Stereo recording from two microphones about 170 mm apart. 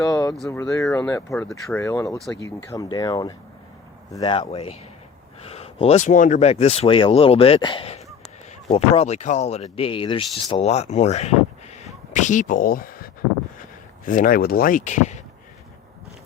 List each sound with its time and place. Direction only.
0.0 s a sound: 20° left (ahead or behind)
0.6 s speech: 20° left (ahead or behind)
1.5 s speech: centre (ahead or behind)
1.8 s speech: 20° left (ahead or behind); by 15.2 s 45° left (ahead or behind)